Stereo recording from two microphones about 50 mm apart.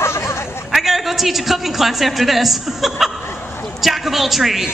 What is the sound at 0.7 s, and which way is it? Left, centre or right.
A man's voice, centre.